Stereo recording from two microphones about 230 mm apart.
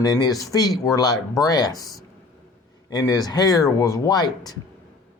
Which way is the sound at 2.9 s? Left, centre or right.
Centre.